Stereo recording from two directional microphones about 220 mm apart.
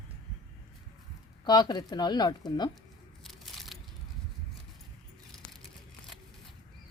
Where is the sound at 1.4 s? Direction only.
20° left (ahead or behind).